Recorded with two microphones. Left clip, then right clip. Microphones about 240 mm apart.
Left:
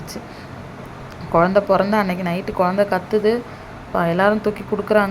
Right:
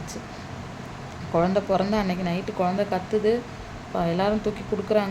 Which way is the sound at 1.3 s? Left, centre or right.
Centre.